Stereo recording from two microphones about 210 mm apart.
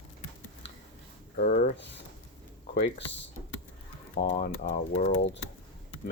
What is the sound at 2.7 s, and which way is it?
Speech, 55° left (ahead or behind).